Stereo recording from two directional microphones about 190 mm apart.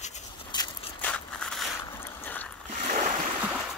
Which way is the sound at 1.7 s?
10° left (ahead or behind).